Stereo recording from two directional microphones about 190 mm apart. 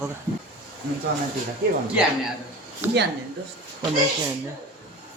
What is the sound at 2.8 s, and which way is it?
Speech, 10° right (ahead or behind).